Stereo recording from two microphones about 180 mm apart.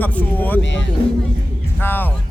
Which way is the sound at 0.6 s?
85° left.